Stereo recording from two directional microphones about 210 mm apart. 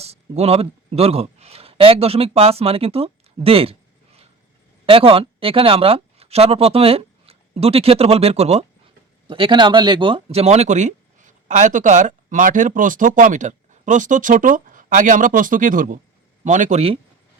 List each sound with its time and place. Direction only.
0.0 s a man's voice: 30° right (ahead or behind)
4.9 s speech: 25° right (ahead or behind)